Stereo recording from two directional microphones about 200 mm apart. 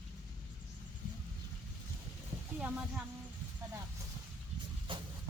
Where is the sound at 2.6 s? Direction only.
5° right (ahead or behind).